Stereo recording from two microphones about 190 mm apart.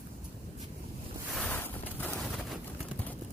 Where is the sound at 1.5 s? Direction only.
10° left (ahead or behind).